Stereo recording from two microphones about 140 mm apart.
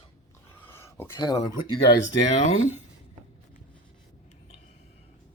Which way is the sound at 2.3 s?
55° left (ahead or behind).